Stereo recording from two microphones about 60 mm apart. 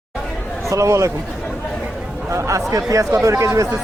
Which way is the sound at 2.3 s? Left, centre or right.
Right.